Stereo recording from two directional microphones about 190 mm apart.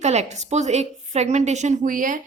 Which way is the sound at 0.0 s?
35° right (ahead or behind).